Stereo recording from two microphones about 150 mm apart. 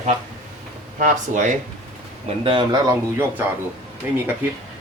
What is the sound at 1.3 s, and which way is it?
Speech, 55° right (ahead or behind).